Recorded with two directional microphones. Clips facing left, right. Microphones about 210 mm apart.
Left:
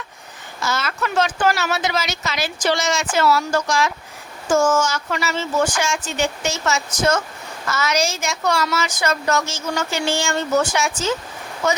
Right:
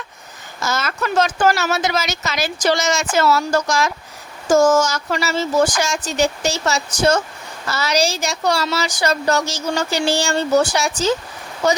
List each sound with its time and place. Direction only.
0.6 s a woman's voice: 45° right (ahead or behind)